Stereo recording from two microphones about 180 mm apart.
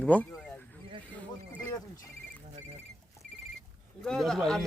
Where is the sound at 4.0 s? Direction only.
Centre (ahead or behind).